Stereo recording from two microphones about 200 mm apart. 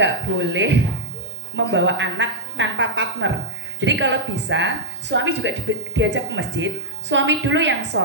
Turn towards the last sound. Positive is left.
turn(degrees=-65)  # may be behind; listen again after turning